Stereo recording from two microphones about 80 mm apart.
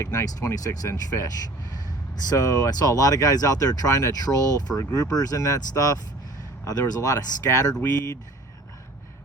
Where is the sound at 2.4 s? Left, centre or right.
Left.